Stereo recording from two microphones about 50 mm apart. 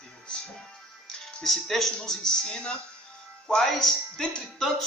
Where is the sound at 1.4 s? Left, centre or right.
Centre.